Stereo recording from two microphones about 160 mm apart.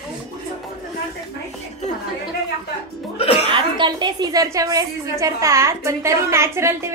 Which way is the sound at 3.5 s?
30° right (ahead or behind).